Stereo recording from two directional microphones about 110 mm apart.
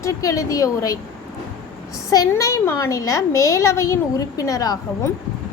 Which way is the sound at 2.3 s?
25° left (ahead or behind).